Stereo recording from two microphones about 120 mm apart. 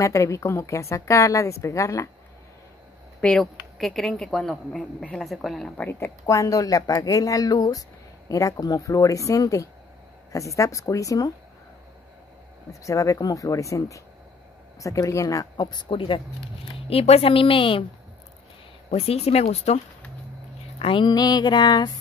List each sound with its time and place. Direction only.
0.0 s a woman's voice: 25° left (ahead or behind)
3.2 s a woman's voice: 5° left (ahead or behind)
5.9 s a woman's voice: 20° left (ahead or behind)
12.8 s a woman's voice: 25° left (ahead or behind); by 17.8 s 45° left (ahead or behind)
18.9 s speech: 60° left (ahead or behind)
20.8 s a sound: 40° left (ahead or behind)